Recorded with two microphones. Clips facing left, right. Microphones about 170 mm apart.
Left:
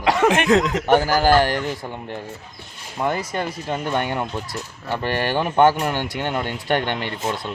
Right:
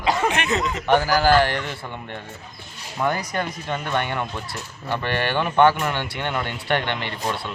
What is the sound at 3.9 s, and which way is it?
A man's voice, 40° left (ahead or behind).